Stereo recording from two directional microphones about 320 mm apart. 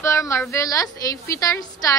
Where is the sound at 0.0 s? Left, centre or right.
Centre.